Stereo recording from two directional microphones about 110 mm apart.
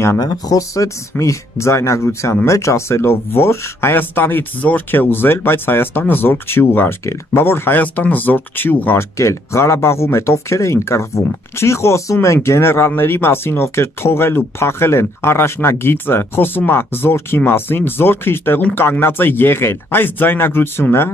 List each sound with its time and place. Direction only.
0.2 s speech: 35° left (ahead or behind)